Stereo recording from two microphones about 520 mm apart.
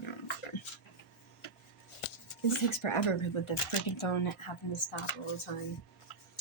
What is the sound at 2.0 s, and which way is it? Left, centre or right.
Speech, left.